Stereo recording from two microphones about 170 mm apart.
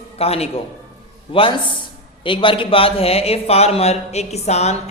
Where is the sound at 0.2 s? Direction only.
35° left (ahead or behind).